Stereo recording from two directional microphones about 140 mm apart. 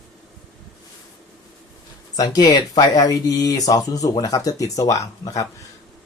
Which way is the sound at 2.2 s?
30° left (ahead or behind).